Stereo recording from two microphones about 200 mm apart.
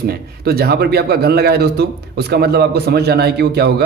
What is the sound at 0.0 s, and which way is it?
A man's voice, 50° right (ahead or behind).